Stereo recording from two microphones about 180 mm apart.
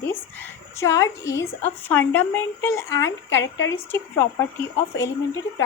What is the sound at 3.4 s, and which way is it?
Speech, 90° left.